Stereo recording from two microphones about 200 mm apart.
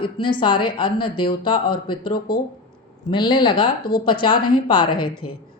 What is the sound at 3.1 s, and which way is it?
A woman's voice, 20° left (ahead or behind).